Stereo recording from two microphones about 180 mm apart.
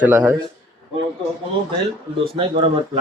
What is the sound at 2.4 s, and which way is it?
Speech, 30° right (ahead or behind).